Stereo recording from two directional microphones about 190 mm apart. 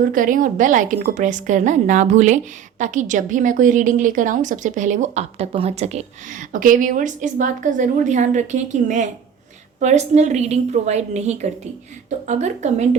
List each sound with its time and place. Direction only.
0.0 s a woman's voice: 45° right (ahead or behind)